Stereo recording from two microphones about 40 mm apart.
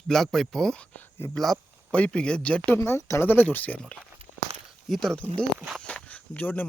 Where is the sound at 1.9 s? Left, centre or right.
Left.